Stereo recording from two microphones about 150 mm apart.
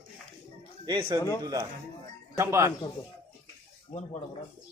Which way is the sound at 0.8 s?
30° right (ahead or behind).